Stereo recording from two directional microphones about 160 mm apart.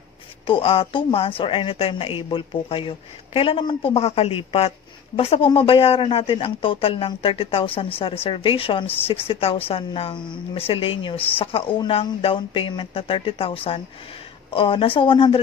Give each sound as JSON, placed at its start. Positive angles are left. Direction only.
{"t": 0.5, "sound": "a woman's voice", "side_deg": 35}